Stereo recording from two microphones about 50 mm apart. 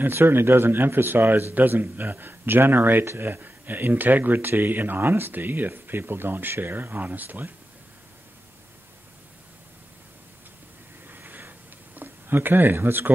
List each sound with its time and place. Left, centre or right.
0.1 s speech: right
11.1 s a sound: right
12.7 s speech: right